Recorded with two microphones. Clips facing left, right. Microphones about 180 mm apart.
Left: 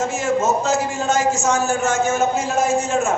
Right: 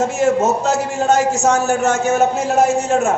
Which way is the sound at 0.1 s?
65° right (ahead or behind).